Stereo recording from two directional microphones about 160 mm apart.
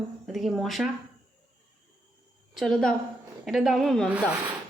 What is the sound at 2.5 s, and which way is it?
A woman's voice, 5° left (ahead or behind).